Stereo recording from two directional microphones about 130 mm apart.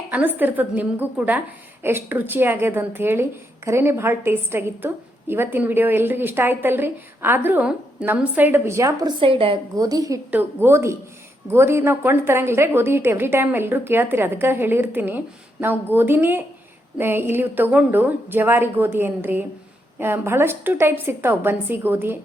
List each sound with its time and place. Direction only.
0.1 s a woman's voice: 15° right (ahead or behind)
9.2 s a woman's voice: 45° right (ahead or behind)
9.7 s a woman's voice: 30° right (ahead or behind)
10.3 s a woman's voice: 15° right (ahead or behind)